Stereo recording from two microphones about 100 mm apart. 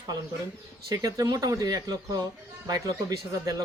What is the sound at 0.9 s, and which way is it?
Speech, 40° right (ahead or behind).